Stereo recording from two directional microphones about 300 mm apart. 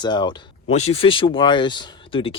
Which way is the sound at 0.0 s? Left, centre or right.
Centre.